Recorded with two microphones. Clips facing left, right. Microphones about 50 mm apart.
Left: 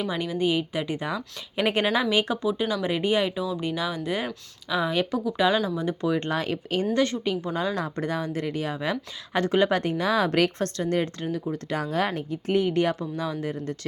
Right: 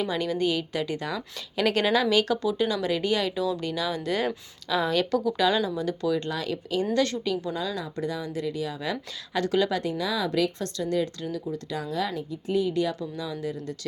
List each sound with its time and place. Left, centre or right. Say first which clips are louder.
0.1 s a woman's voice: left 1 dB; centre; by 6.8 s left
6.9 s speech: left 1 dB; left